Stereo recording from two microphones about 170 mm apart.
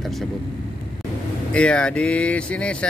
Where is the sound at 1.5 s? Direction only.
5° left (ahead or behind).